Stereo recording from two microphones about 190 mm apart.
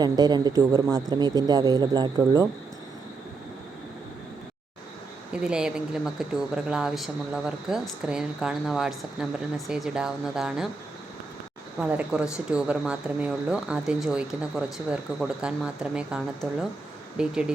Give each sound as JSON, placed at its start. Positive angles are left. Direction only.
{"t": 0.0, "sound": "speech", "side_deg": -20}
{"t": 5.3, "sound": "speech", "side_deg": -5}
{"t": 11.8, "sound": "speech", "side_deg": -5}